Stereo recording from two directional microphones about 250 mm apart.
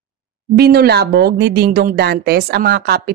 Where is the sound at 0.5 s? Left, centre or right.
Right.